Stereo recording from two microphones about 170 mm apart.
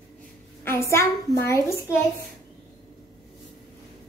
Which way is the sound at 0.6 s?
15° left (ahead or behind).